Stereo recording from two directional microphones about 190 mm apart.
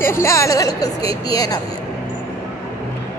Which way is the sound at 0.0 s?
15° left (ahead or behind).